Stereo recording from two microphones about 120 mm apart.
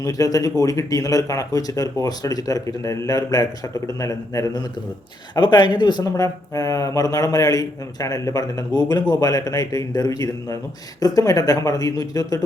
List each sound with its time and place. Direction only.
0.0 s speech: 30° left (ahead or behind)
5.3 s speech: 40° left (ahead or behind)